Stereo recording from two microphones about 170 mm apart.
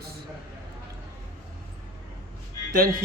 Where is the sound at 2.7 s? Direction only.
55° right (ahead or behind).